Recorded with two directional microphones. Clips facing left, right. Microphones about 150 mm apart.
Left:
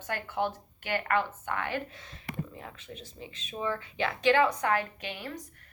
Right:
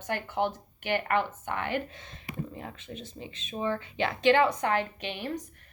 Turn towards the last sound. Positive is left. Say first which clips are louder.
# right 4 dB
turn(degrees=-20)  # may be behind; listen again after turning